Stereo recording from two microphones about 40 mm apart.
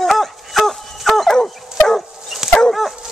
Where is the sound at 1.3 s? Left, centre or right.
Centre.